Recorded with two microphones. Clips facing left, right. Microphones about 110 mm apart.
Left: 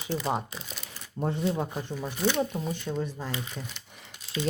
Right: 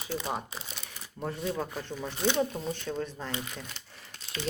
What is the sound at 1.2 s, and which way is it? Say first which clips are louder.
Speech: left 4 dB; 25° left (ahead or behind).